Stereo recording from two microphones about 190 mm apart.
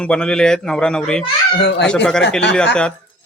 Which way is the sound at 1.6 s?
65° left (ahead or behind).